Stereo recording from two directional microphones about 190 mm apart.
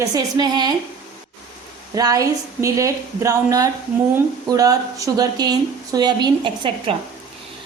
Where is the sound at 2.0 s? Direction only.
20° right (ahead or behind).